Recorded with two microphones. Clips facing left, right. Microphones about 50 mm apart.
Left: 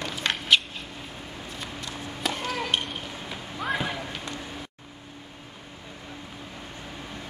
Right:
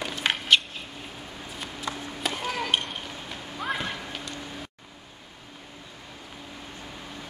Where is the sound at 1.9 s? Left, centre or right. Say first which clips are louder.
Right 4 dB; right.